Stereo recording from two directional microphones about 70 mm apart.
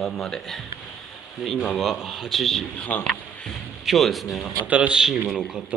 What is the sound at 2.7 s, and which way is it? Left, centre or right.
Speech, left.